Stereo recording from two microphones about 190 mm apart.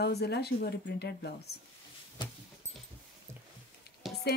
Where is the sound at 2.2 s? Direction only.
25° left (ahead or behind).